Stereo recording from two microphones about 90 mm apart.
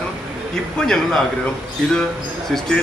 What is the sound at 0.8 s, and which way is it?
Speech, 5° left (ahead or behind).